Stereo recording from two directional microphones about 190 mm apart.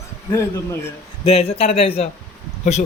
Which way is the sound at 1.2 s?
30° left (ahead or behind).